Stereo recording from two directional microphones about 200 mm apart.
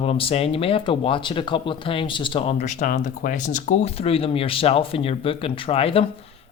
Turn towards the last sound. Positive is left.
turn(degrees=30)  # may be behind; listen again after turning